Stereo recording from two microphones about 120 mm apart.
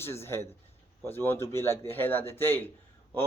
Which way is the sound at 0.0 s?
20° left (ahead or behind).